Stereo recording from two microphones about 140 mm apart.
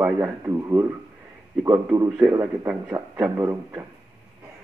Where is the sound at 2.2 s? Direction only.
20° right (ahead or behind).